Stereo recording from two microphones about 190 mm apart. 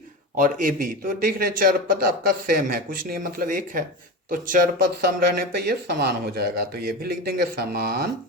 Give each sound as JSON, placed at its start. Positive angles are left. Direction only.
{"t": 0.3, "sound": "a man's voice", "side_deg": -45}